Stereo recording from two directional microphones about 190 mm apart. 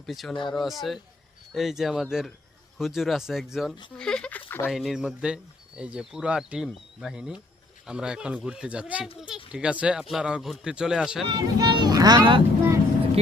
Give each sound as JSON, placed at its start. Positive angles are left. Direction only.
{"t": 0.0, "sound": "speech", "side_deg": 0}
{"t": 4.7, "sound": "speech", "side_deg": 0}
{"t": 9.1, "sound": "a sound", "side_deg": -5}
{"t": 9.5, "sound": "speech", "side_deg": -5}
{"t": 11.3, "sound": "speech", "side_deg": -20}